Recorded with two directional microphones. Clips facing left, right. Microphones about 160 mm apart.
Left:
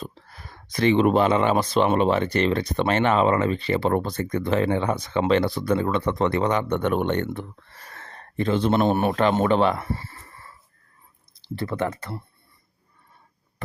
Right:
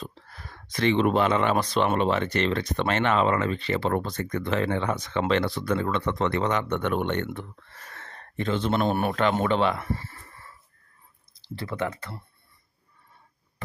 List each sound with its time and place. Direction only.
0.7 s speech: 40° left (ahead or behind)
11.6 s speech: 45° left (ahead or behind)